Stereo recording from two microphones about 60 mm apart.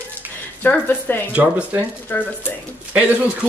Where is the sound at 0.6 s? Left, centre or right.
Left.